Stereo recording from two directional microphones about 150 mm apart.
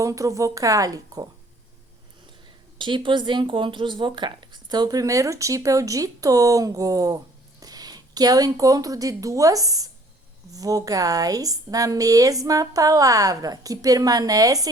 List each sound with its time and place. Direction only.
0.0 s speech: 20° right (ahead or behind)
2.7 s speech: 30° right (ahead or behind)